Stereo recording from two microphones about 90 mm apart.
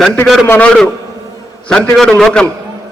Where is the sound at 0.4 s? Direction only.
20° left (ahead or behind).